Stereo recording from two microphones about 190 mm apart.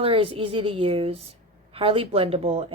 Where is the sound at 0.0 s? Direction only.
30° right (ahead or behind).